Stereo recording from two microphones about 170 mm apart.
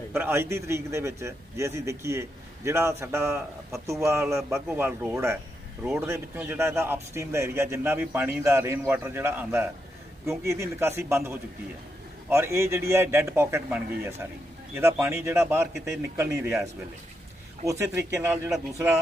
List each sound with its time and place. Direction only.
0.1 s a man's voice: 15° right (ahead or behind)
17.7 s a man's voice: 20° right (ahead or behind)